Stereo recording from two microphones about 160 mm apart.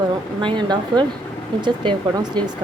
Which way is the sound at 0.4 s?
30° right (ahead or behind).